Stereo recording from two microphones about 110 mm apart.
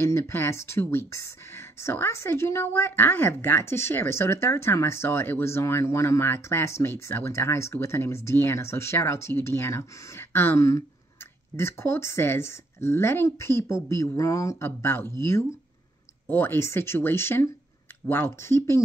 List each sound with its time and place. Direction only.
0.0 s speech: 20° left (ahead or behind)